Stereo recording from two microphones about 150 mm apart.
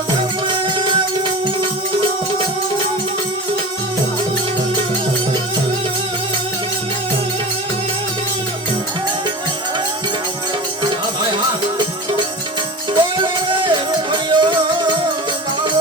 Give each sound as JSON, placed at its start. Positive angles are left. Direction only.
{"t": 12.9, "sound": "music", "side_deg": -30}